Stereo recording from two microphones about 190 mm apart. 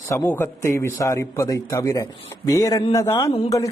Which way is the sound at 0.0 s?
15° left (ahead or behind).